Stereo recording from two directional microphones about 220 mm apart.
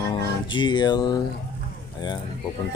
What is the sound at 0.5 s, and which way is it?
Music, 20° left (ahead or behind).